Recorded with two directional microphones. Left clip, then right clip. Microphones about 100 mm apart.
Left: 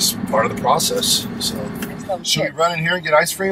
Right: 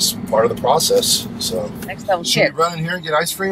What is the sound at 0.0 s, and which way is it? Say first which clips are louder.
Speech: right 2 dB; centre (ahead or behind).